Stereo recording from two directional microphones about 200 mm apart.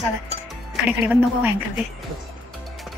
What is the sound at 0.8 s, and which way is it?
Speech, 10° right (ahead or behind).